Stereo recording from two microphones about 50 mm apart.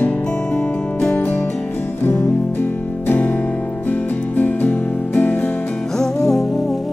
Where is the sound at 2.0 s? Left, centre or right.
Left.